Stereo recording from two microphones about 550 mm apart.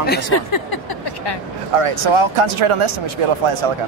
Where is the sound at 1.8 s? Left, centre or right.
Right.